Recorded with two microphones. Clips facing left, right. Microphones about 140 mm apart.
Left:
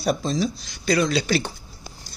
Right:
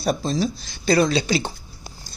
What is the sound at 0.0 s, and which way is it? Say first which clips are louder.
Speech: right 1 dB; 35° right (ahead or behind).